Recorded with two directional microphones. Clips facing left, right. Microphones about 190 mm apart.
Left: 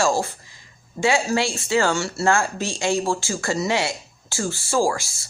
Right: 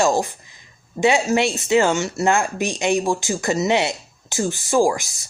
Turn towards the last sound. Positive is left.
turn(degrees=-20)  # may be behind; listen again after turning